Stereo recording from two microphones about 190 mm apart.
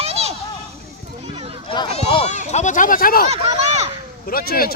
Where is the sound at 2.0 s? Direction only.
35° left (ahead or behind); by 3.2 s 50° left (ahead or behind).